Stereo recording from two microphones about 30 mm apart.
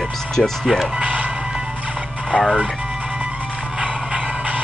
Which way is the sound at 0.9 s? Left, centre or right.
Right.